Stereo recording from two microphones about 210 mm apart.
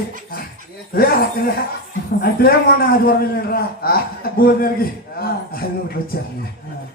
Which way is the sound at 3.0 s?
45° left (ahead or behind).